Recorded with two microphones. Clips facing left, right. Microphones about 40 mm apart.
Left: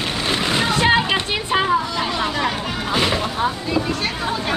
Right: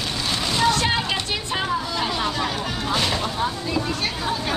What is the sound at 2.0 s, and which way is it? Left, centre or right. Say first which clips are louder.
Speech: left 3 dB; centre.